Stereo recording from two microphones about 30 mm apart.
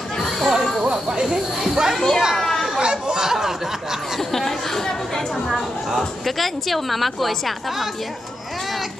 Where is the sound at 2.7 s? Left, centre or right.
Right.